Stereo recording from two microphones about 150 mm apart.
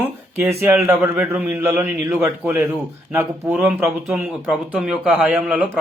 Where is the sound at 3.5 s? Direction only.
5° right (ahead or behind).